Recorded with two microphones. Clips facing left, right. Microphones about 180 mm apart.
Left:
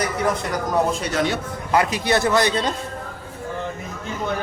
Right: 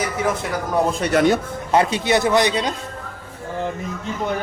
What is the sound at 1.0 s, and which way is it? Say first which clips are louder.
Speech: right 6 dB; 55° right (ahead or behind).